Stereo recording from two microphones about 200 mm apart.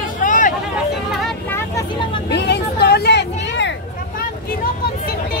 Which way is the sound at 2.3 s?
60° left (ahead or behind).